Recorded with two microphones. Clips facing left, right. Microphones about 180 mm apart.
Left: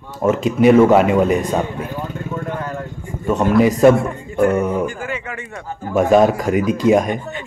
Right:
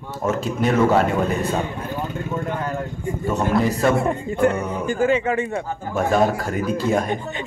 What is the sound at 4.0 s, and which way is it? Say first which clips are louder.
Speech: left 1 dB; 25° right (ahead or behind).